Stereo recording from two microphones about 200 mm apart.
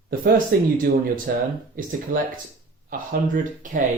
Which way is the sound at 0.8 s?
45° right (ahead or behind).